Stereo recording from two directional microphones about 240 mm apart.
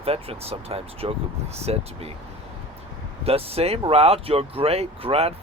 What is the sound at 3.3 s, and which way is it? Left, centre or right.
Speech, right.